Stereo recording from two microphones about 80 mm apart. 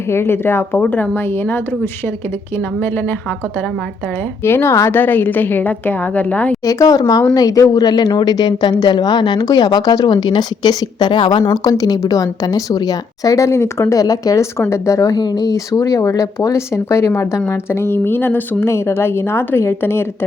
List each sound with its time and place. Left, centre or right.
0.1 s a woman's voice: left
4.4 s a woman's voice: left
6.7 s a woman's voice: left
10.1 s a woman's voice: left
14.0 s a woman's voice: left
14.6 s a woman's voice: left
15.2 s a woman's voice: left